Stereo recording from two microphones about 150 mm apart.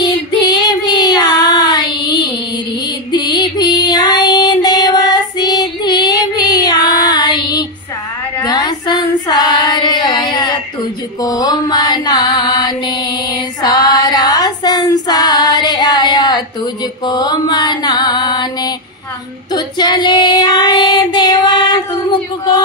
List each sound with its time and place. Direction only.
0.0 s child singing: 25° left (ahead or behind)
3.1 s music: 30° left (ahead or behind)
8.4 s female singing: 25° left (ahead or behind)
11.1 s mantra: 25° left (ahead or behind)
19.5 s child singing: 30° left (ahead or behind)